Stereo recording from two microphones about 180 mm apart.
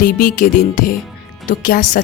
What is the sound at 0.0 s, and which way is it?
A woman's voice, 50° left (ahead or behind).